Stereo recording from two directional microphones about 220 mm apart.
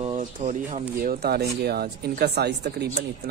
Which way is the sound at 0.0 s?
30° right (ahead or behind).